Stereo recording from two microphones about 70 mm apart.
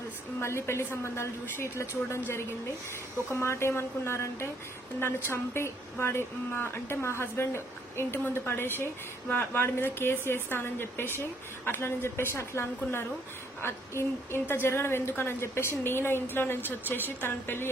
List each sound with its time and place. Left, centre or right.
0.3 s speech: left